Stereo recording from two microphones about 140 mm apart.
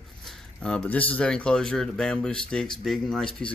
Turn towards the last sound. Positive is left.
turn(degrees=5)  # may be behind; listen again after turning